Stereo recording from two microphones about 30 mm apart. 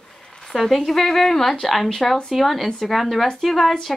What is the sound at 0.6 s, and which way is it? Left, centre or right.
Speech, centre.